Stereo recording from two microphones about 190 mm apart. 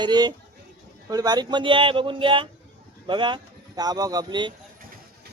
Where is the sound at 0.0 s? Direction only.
20° right (ahead or behind).